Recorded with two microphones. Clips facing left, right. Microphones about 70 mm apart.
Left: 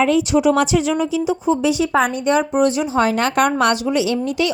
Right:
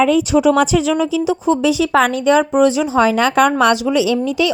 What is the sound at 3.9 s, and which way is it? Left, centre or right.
Speech, right.